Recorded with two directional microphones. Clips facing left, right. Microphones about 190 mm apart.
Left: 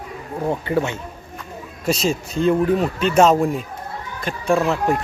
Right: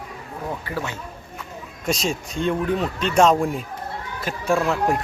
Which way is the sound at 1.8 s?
Centre (ahead or behind).